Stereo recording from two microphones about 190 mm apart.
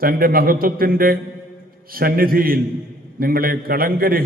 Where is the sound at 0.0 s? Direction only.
50° right (ahead or behind).